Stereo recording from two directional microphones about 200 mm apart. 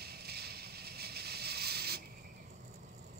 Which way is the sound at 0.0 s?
50° right (ahead or behind).